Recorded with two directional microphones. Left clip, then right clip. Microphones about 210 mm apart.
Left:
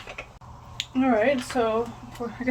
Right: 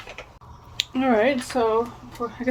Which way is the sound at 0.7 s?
40° right (ahead or behind).